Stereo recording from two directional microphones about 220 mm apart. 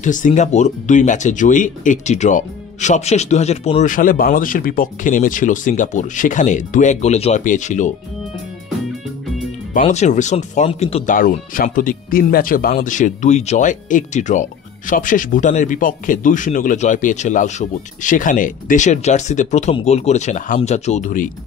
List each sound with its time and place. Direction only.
0.0 s speech: 35° left (ahead or behind)
9.8 s speech: 30° left (ahead or behind)
11.1 s speech: 40° left (ahead or behind)